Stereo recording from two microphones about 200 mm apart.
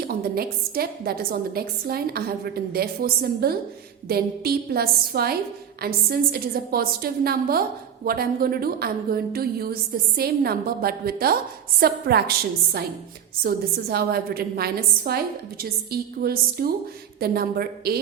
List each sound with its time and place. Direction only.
0.1 s a woman's voice: 50° right (ahead or behind)
13.4 s a woman's voice: 50° right (ahead or behind)